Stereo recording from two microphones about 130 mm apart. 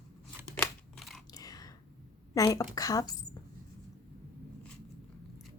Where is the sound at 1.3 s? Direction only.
30° left (ahead or behind).